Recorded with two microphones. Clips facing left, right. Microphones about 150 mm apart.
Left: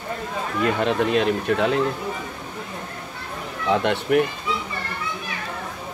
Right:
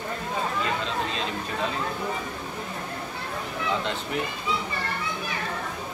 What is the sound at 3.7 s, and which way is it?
Speech, 65° left (ahead or behind).